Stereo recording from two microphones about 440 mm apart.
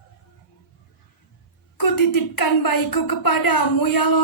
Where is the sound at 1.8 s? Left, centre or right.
Left.